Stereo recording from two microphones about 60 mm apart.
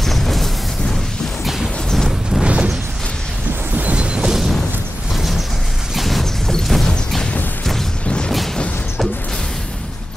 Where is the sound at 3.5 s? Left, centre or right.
Right.